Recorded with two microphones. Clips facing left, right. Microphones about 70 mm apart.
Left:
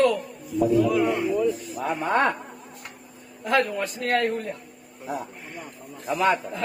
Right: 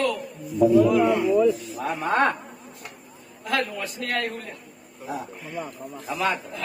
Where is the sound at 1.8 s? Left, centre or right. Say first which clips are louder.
Even; left.